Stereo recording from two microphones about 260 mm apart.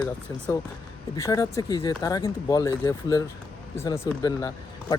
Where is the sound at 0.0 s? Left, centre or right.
Centre.